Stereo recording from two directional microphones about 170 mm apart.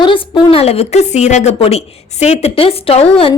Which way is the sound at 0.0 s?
30° left (ahead or behind).